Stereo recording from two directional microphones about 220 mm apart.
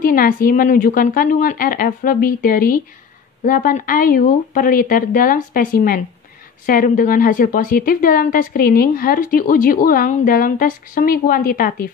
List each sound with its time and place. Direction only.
0.0 s a woman's voice: 40° left (ahead or behind)